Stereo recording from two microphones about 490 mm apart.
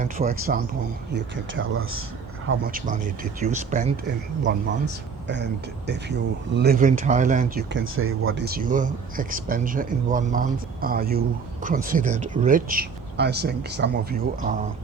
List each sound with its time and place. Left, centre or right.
0.0 s speech: centre
5.3 s speech: right